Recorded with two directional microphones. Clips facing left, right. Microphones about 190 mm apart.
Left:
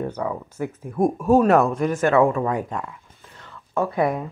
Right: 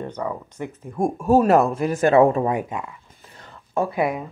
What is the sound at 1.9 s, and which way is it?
Speech, 35° right (ahead or behind).